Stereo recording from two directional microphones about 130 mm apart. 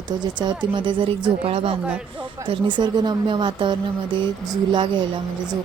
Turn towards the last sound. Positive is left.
turn(degrees=-35)  # may be behind; listen again after turning